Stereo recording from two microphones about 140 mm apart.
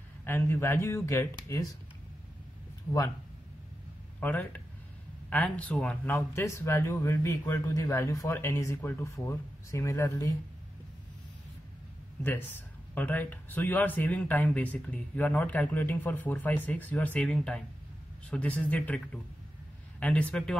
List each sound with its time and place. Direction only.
0.2 s speech: 15° left (ahead or behind)
4.2 s speech: 10° left (ahead or behind)
12.2 s speech: 15° left (ahead or behind)
20.0 s speech: 10° left (ahead or behind)